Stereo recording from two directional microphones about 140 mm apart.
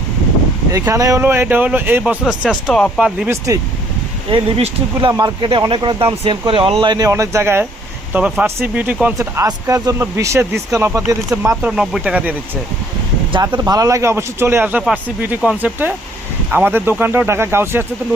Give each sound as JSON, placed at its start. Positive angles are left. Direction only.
{"t": 0.7, "sound": "speech", "side_deg": -25}
{"t": 4.3, "sound": "speech", "side_deg": -40}
{"t": 4.9, "sound": "speech", "side_deg": -30}
{"t": 6.8, "sound": "speech", "side_deg": -30}
{"t": 9.1, "sound": "speech", "side_deg": -25}
{"t": 11.6, "sound": "speech", "side_deg": -5}
{"t": 13.3, "sound": "speech", "side_deg": -30}